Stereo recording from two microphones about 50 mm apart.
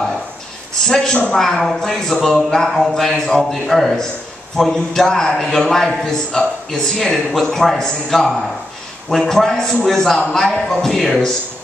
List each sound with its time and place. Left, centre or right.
0.8 s a man's voice: centre